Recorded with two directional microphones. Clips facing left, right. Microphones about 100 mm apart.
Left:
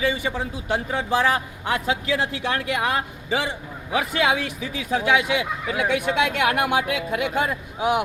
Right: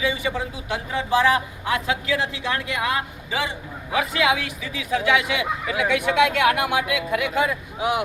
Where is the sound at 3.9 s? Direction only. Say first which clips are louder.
Even; 40° left (ahead or behind).